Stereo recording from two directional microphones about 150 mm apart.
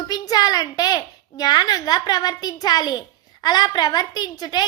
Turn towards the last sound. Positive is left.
turn(degrees=25)  # may be behind; listen again after turning